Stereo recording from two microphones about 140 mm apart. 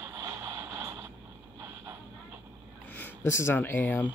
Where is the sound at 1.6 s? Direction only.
20° right (ahead or behind).